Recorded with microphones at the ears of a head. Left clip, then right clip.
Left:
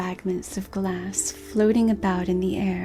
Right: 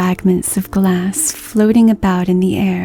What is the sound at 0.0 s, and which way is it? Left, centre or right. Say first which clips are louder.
Speech: right 12 dB; right.